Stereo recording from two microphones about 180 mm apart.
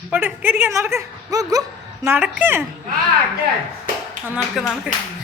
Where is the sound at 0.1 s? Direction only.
10° right (ahead or behind).